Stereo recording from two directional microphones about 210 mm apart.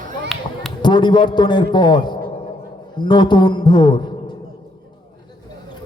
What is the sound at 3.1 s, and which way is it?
Speech, 20° left (ahead or behind).